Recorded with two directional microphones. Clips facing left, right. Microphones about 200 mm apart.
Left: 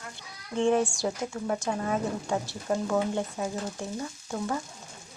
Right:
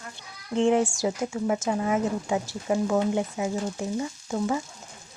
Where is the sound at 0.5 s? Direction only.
20° right (ahead or behind).